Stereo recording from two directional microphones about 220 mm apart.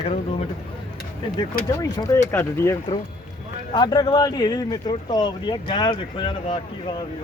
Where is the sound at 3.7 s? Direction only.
20° left (ahead or behind).